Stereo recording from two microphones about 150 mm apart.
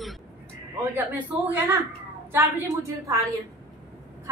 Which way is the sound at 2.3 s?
20° right (ahead or behind).